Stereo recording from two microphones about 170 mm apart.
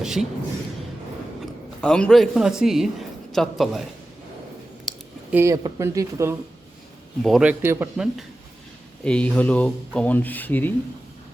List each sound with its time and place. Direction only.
0.0 s speech: 5° right (ahead or behind)
1.8 s a man's voice: 5° left (ahead or behind)
5.3 s speech: 15° right (ahead or behind)
7.2 s a man's voice: centre (ahead or behind)
7.6 s speech: 15° right (ahead or behind)
9.0 s speech: 5° left (ahead or behind)